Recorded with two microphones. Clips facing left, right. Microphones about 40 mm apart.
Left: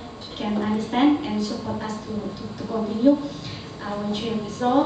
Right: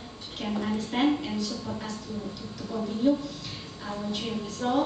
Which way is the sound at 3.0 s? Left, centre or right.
Centre.